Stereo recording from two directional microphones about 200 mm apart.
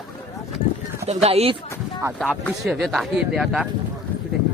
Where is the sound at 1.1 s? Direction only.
30° right (ahead or behind).